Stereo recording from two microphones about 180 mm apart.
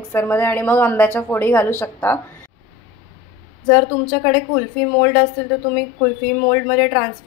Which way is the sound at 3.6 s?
10° left (ahead or behind).